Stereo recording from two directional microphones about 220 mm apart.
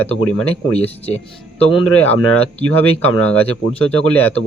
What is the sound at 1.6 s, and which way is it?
Speech, 5° left (ahead or behind).